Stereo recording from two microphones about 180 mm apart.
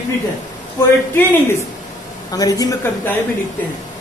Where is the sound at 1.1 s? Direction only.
10° left (ahead or behind).